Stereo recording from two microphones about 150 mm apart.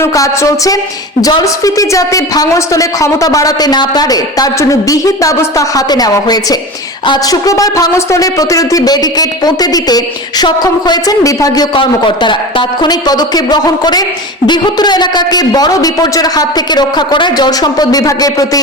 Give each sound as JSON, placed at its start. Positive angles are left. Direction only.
{"t": 0.0, "sound": "speech", "side_deg": 20}